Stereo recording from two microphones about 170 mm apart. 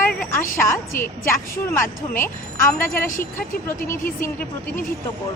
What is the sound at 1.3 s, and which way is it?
Speech, 15° left (ahead or behind).